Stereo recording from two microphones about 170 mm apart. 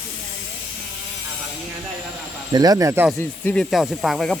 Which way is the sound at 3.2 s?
10° left (ahead or behind).